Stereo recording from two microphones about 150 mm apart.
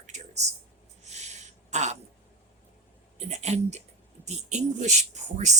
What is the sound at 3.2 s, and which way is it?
Speech, 50° right (ahead or behind).